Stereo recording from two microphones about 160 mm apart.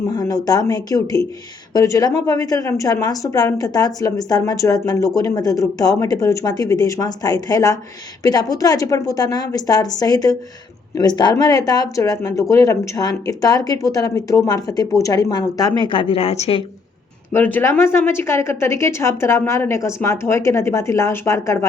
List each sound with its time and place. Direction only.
0.1 s a woman's voice: 25° left (ahead or behind); by 16.6 s 40° left (ahead or behind)
17.3 s a woman's voice: 10° left (ahead or behind)